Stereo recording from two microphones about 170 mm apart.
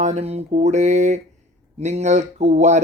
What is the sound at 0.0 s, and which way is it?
Speech, 40° right (ahead or behind).